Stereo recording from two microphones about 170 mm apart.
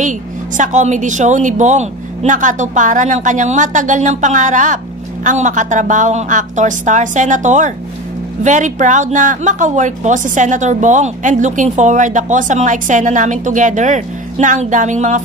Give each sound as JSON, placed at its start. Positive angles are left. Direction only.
{"t": 0.6, "sound": "a woman's voice", "side_deg": -45}